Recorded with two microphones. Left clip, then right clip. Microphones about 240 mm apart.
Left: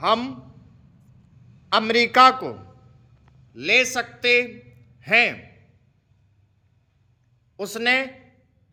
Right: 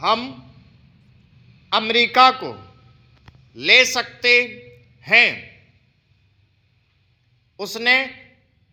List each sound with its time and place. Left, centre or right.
0.0 s a man's voice: centre
1.7 s a man's voice: centre
3.7 s a man's voice: centre
7.5 s a man's voice: centre